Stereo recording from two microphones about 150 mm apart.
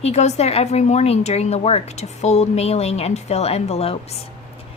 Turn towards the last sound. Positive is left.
turn(degrees=40)  # may be behind; listen again after turning